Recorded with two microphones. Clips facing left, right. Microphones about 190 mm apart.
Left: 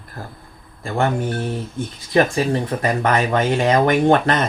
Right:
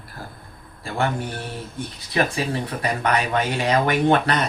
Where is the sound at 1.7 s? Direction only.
45° left (ahead or behind).